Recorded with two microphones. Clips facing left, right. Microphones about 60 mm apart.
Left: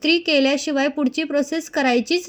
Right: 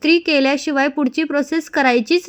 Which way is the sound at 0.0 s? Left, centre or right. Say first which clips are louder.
Right 3 dB; right.